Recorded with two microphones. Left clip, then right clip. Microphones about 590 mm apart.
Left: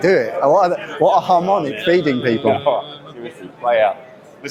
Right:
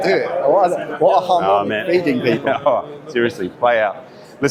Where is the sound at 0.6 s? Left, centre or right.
Left.